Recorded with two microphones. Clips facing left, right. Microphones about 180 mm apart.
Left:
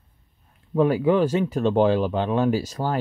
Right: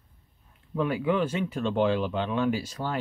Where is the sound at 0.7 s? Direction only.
40° left (ahead or behind).